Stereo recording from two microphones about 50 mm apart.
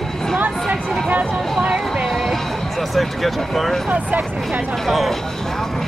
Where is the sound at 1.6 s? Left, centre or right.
Centre.